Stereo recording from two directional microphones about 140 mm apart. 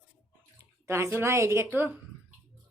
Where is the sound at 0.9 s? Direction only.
20° right (ahead or behind).